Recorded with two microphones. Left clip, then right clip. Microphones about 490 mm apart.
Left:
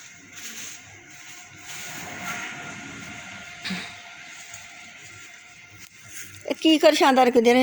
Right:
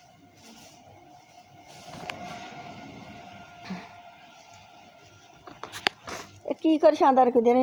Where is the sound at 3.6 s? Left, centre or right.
Right.